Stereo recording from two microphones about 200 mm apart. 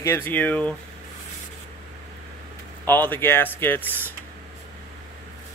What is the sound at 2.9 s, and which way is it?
Speech, 10° left (ahead or behind).